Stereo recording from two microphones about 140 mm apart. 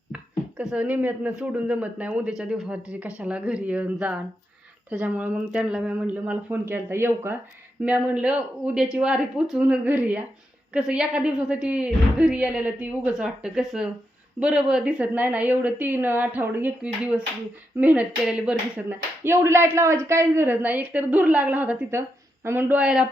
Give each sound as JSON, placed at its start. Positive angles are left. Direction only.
{"t": 0.1, "sound": "a woman's voice", "side_deg": -5}
{"t": 18.9, "sound": "a woman's voice", "side_deg": -15}